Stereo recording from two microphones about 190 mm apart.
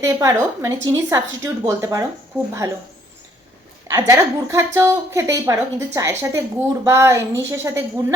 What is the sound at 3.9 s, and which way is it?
A woman's voice, 15° right (ahead or behind).